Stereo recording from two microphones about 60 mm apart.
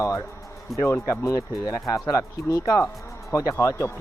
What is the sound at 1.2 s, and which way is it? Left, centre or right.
Speech, left.